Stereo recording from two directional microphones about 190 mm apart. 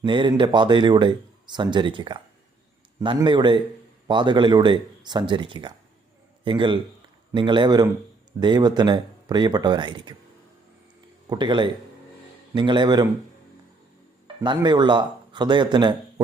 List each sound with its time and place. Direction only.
0.0 s a man's voice: 25° right (ahead or behind)
11.3 s speech: 25° right (ahead or behind)
14.4 s speech: 25° right (ahead or behind)